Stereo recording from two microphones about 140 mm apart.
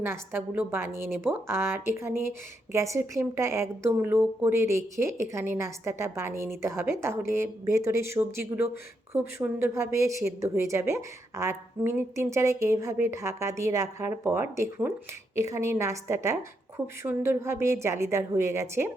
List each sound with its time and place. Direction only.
0.0 s a woman's voice: 15° right (ahead or behind)